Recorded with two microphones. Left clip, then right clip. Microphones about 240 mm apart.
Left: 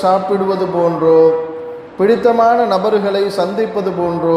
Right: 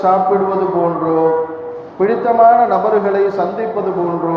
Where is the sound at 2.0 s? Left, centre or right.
Left.